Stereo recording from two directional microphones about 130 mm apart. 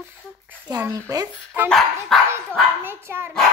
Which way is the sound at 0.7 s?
25° right (ahead or behind).